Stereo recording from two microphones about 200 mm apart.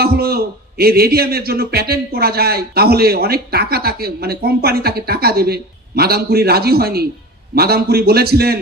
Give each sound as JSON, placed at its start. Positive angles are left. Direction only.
{"t": 0.0, "sound": "a man's voice", "side_deg": -50}